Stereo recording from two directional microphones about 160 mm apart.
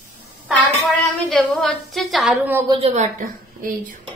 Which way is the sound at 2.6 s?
35° right (ahead or behind).